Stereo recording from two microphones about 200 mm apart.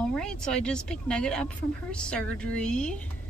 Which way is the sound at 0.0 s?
5° left (ahead or behind).